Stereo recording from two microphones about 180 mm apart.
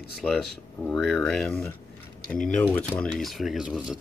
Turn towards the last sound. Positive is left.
turn(degrees=-5)  # may be behind; listen again after turning